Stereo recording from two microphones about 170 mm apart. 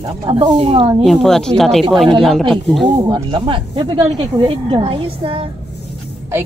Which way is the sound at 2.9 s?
30° right (ahead or behind).